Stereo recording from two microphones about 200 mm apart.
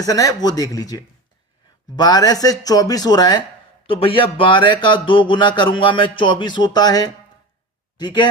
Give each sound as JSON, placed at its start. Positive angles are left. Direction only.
{"t": 0.0, "sound": "speech", "side_deg": 15}